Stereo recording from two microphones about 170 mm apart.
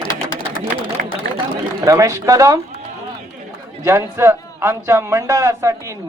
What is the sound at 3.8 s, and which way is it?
A man's voice, 15° right (ahead or behind).